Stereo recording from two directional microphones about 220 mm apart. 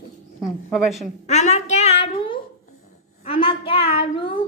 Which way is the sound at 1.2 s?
30° left (ahead or behind).